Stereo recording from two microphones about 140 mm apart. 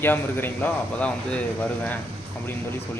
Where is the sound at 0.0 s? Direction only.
15° left (ahead or behind).